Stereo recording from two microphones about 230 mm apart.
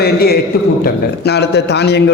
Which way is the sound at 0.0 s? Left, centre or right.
Left.